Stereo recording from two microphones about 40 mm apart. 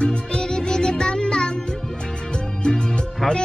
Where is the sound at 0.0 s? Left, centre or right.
Centre.